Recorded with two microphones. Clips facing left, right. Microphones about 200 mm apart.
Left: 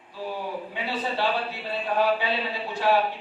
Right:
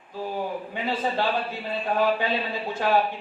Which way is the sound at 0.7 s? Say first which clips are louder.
Right 3 dB; 50° right (ahead or behind).